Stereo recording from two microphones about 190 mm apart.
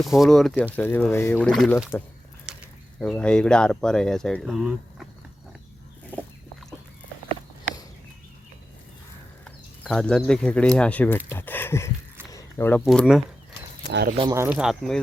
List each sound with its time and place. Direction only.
0.0 s speech: centre (ahead or behind)
2.5 s a sound: 5° right (ahead or behind)
3.0 s speech: 5° left (ahead or behind)
9.4 s speech: 5° left (ahead or behind)
12.3 s zipper: 15° left (ahead or behind)
12.8 s speech: centre (ahead or behind)
14.2 s speech: 15° right (ahead or behind)
14.5 s speech: centre (ahead or behind)